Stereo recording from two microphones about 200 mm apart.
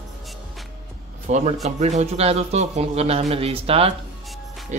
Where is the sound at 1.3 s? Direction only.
35° right (ahead or behind).